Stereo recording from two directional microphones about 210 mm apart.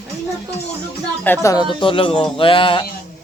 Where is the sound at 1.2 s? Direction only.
10° left (ahead or behind).